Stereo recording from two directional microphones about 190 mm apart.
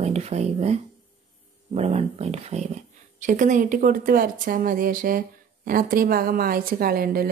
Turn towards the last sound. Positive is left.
turn(degrees=-50)  # may be behind; listen again after turning